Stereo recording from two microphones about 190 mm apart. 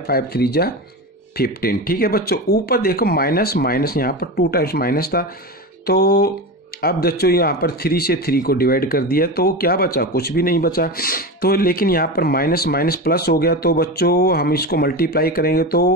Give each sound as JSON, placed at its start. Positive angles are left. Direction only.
{"t": 0.0, "sound": "speech", "side_deg": 55}